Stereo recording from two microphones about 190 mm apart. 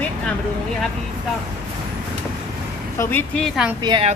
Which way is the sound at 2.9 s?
15° left (ahead or behind).